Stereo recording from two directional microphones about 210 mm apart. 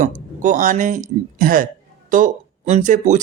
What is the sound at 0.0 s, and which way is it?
Speech, 40° right (ahead or behind).